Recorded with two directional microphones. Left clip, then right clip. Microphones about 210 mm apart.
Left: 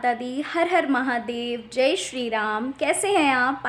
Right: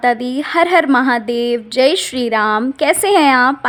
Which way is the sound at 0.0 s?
40° right (ahead or behind).